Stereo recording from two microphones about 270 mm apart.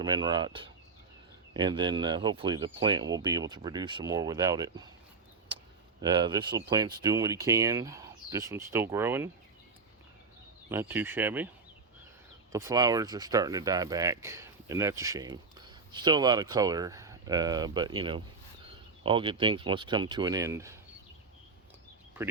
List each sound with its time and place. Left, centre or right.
0.0 s speech: centre
6.0 s speech: centre
10.7 s speech: centre
12.5 s speech: centre